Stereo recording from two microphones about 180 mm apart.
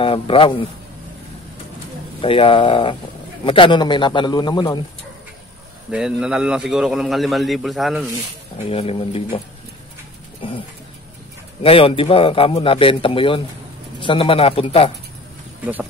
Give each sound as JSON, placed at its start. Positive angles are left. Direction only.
{"t": 0.0, "sound": "speech", "side_deg": 30}
{"t": 2.2, "sound": "speech", "side_deg": 30}
{"t": 5.9, "sound": "a man's voice", "side_deg": -5}
{"t": 8.6, "sound": "speech", "side_deg": 35}
{"t": 10.4, "sound": "speech", "side_deg": 30}
{"t": 11.6, "sound": "speech", "side_deg": 30}
{"t": 15.6, "sound": "speech", "side_deg": -10}